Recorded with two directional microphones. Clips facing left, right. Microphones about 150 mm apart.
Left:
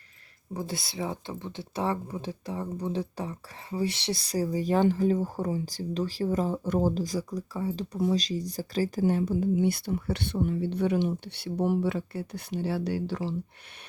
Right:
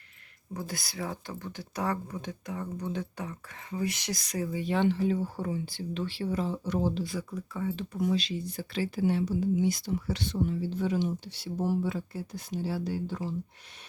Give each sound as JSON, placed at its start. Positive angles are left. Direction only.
{"t": 0.5, "sound": "speech", "side_deg": 25}